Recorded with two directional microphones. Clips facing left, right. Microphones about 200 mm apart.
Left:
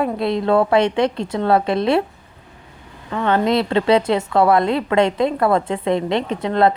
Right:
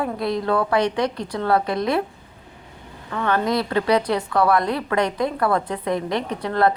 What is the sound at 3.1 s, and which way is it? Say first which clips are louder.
A woman's voice: left 4 dB; 20° left (ahead or behind).